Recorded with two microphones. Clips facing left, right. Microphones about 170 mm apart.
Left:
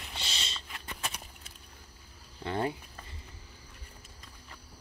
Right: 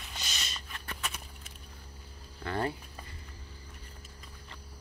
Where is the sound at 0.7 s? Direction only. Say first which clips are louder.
Even; 15° left (ahead or behind).